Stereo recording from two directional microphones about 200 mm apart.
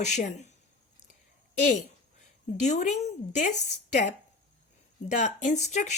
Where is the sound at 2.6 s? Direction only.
35° left (ahead or behind).